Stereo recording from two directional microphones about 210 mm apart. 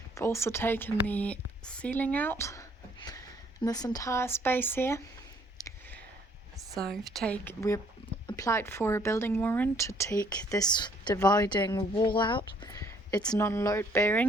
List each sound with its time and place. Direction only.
0.1 s a woman's voice: 15° left (ahead or behind)
5.5 s a sound: 15° left (ahead or behind)
7.2 s a woman's voice: 5° left (ahead or behind)